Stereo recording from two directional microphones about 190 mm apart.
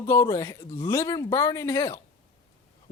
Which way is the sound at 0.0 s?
15° left (ahead or behind).